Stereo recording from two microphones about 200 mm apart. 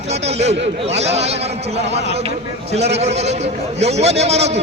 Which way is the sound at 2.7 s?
35° right (ahead or behind).